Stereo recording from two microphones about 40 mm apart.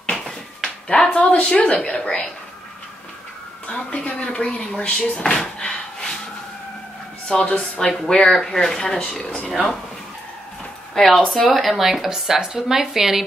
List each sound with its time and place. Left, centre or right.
0.1 s dishes: centre
1.3 s a woman's voice: left
3.6 s speech: left
7.3 s speech: left
8.1 s speech: centre
9.2 s speech: left
9.5 s speech: centre
11.0 s speech: centre